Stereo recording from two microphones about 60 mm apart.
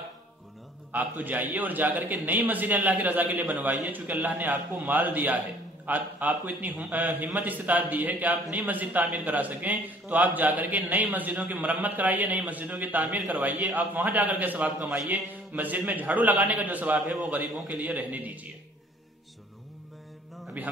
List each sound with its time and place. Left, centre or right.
0.9 s speech: right
20.6 s speech: right